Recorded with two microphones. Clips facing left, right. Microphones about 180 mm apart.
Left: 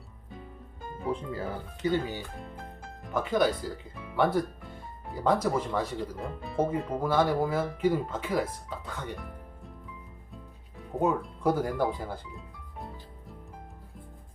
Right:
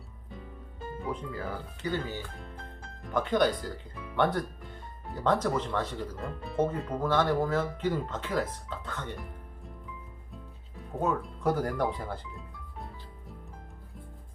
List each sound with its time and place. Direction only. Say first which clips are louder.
1.1 s speech: left 2 dB; 25° left (ahead or behind)
3.0 s speech: even; 5° left (ahead or behind)
11.4 s music: left 2 dB; 10° left (ahead or behind)